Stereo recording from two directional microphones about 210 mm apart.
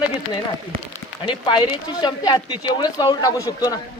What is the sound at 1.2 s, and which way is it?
Speech, 20° left (ahead or behind).